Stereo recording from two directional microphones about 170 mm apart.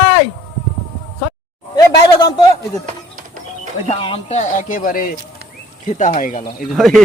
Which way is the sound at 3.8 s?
35° left (ahead or behind).